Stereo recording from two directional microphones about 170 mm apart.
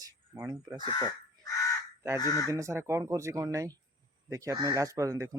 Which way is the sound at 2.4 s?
20° right (ahead or behind).